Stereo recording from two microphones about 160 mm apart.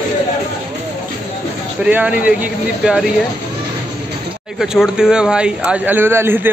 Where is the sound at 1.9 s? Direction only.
10° right (ahead or behind).